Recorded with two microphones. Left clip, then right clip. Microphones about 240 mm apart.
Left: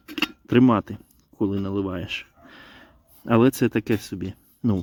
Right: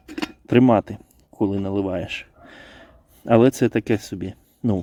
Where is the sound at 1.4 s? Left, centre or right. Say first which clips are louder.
Right 3 dB; centre.